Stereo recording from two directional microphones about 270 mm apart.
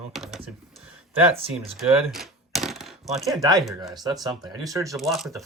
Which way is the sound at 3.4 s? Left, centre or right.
Centre.